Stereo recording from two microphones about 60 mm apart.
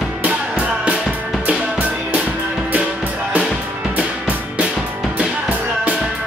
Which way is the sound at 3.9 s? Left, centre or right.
Right.